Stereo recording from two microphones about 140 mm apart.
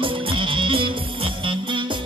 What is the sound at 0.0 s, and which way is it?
Music, 40° right (ahead or behind).